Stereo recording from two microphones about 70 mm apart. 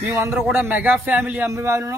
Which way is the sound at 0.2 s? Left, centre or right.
Right.